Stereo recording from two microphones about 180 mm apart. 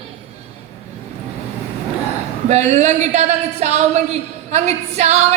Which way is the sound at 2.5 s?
40° right (ahead or behind).